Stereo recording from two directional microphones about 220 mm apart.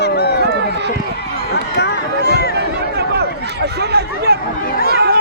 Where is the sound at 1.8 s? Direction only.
45° left (ahead or behind).